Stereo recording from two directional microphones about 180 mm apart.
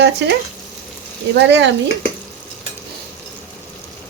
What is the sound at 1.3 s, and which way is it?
Speech, 75° right (ahead or behind).